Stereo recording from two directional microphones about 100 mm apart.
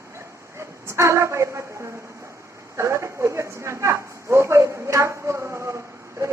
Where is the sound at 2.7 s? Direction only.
30° right (ahead or behind).